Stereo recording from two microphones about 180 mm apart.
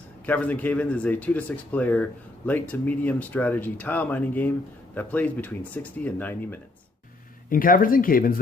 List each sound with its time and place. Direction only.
0.3 s speech: 10° left (ahead or behind)
7.5 s speech: 50° left (ahead or behind)